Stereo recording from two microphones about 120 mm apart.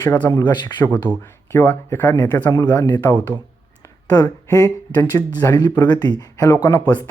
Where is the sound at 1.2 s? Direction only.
20° left (ahead or behind).